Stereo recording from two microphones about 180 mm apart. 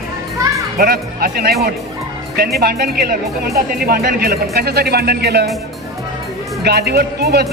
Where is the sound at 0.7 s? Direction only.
55° right (ahead or behind).